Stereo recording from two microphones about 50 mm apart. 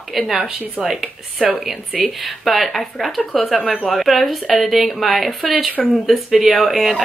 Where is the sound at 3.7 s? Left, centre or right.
Centre.